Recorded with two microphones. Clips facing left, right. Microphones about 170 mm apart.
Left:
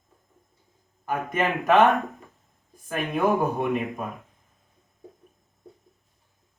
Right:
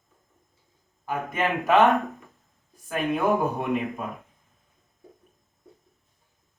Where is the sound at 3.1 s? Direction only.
Centre (ahead or behind).